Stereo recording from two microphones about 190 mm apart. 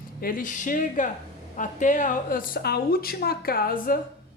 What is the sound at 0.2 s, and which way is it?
A woman's voice, 45° left (ahead or behind).